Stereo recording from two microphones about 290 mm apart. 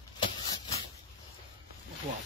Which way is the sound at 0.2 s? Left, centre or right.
Centre.